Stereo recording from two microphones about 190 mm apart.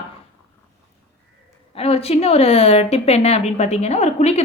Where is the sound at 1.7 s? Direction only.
30° left (ahead or behind).